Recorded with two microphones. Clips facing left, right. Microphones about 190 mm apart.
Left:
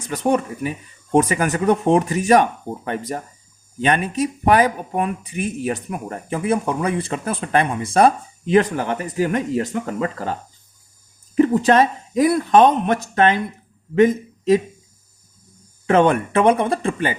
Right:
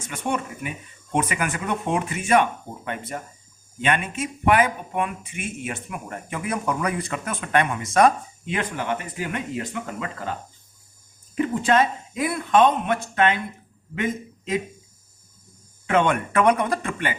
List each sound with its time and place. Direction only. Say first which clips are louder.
0.0 s speech: left 8 dB; 35° left (ahead or behind)
11.3 s a man's voice: left 6 dB; 40° left (ahead or behind)
15.9 s speech: left 5 dB; 35° left (ahead or behind)